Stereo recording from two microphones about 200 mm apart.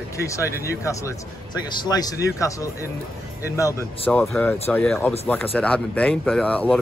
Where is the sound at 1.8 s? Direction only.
20° left (ahead or behind).